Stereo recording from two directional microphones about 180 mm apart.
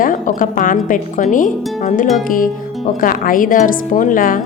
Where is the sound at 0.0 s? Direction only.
50° left (ahead or behind).